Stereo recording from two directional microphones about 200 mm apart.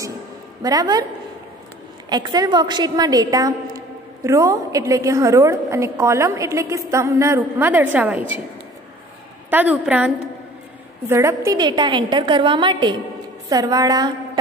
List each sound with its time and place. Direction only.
0.6 s a woman's voice: 20° right (ahead or behind)
2.0 s a woman's voice: 20° right (ahead or behind)
9.5 s a woman's voice: 10° right (ahead or behind)